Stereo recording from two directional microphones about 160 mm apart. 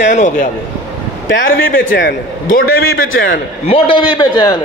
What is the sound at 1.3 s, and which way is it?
A man's voice, 65° left (ahead or behind).